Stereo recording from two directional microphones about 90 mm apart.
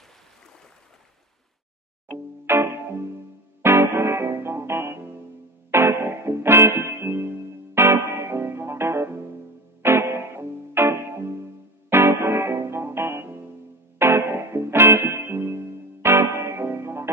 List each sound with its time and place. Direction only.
2.0 s music: 25° right (ahead or behind)